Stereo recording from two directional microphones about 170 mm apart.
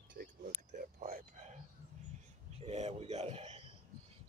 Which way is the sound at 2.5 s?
40° right (ahead or behind).